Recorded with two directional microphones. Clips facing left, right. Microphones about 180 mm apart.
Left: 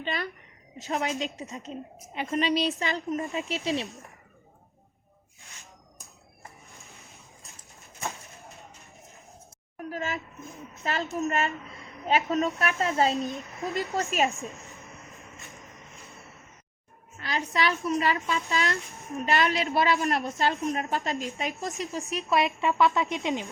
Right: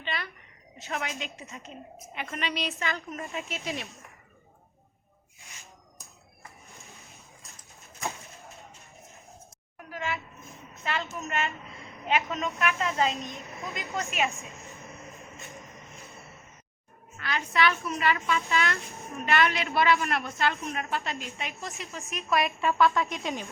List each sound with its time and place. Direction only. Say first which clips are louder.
0.0 s a woman's voice: left 4 dB; 40° left (ahead or behind)
5.4 s a sound: even; 15° right (ahead or behind)
6.7 s a sound: even; centre (ahead or behind)
9.7 s speech: left 2 dB; 40° left (ahead or behind)
10.4 s a woman's voice: left 3 dB; centre (ahead or behind)
11.3 s a woman's voice: left 2 dB; 40° left (ahead or behind)
11.7 s a sound: left 1 dB; 40° left (ahead or behind)
12.3 s a woman's voice: left 3 dB; 40° left (ahead or behind)
13.3 s a woman's voice: left 5 dB; centre (ahead or behind)
13.9 s a woman's voice: left 2 dB; 35° left (ahead or behind)
14.3 s a sound: left 4 dB; centre (ahead or behind)
17.2 s a woman's voice: right 1 dB; 35° left (ahead or behind)
22.3 s speech: left 1 dB; 25° left (ahead or behind)